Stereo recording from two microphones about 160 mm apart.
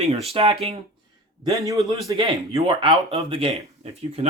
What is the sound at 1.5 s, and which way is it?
Speech, 20° right (ahead or behind).